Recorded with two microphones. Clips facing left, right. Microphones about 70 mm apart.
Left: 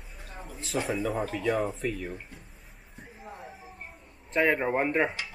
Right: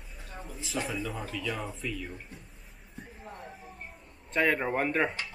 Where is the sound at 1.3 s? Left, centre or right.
Left.